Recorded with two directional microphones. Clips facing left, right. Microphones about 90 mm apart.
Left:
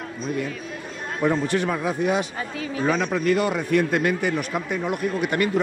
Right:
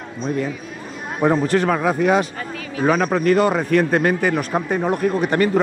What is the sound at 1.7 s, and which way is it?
A man's voice, 65° right (ahead or behind).